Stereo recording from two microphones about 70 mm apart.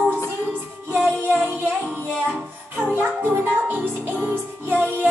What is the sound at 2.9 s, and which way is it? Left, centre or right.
Music, right.